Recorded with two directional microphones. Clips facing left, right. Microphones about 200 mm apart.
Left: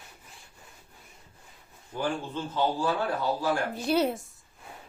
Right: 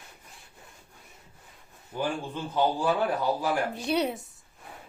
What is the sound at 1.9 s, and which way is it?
Speech, 10° right (ahead or behind).